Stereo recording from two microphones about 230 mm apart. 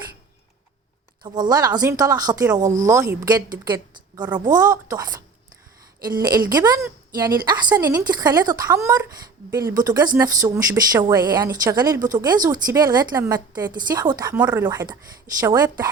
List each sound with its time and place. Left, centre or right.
1.2 s a woman's voice: centre
2.6 s speech: right
2.8 s a woman's voice: centre
6.2 s a woman's voice: centre